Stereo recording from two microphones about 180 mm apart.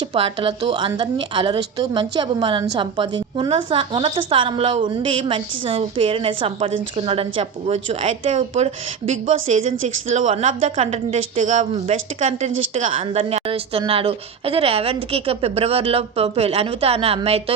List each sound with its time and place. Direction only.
0.1 s a woman's voice: 30° right (ahead or behind)